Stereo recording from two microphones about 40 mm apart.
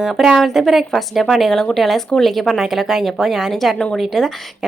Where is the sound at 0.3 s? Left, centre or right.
Centre.